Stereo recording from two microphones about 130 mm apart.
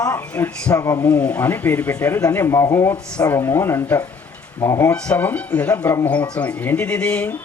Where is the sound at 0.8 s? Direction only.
25° left (ahead or behind).